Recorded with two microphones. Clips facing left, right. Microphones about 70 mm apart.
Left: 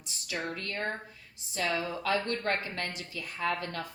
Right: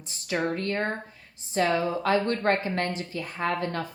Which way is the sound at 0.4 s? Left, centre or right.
Right.